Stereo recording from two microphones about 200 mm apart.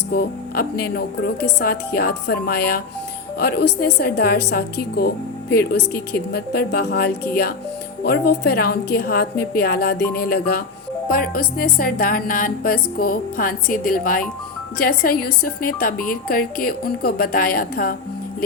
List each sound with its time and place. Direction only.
0.1 s speech: 50° left (ahead or behind)